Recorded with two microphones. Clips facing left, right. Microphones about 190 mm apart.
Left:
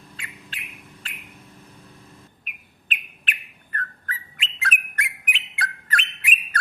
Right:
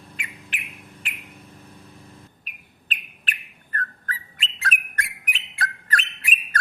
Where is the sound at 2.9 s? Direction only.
40° right (ahead or behind).